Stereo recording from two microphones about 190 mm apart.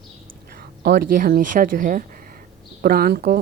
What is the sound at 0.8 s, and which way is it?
Speech, 45° right (ahead or behind).